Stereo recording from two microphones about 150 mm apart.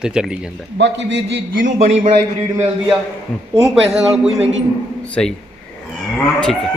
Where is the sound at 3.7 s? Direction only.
5° right (ahead or behind).